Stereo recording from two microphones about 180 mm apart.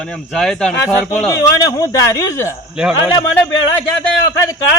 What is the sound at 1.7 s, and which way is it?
Speech, 20° left (ahead or behind).